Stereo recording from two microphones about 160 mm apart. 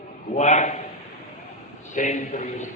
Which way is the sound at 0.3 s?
50° left (ahead or behind).